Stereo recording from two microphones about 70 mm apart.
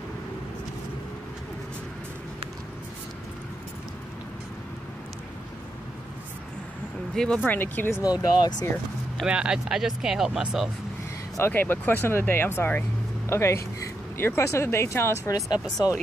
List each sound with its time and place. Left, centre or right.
7.4 s speech: left
8.0 s speech: left
9.2 s speech: centre
11.5 s speech: left
15.2 s speech: left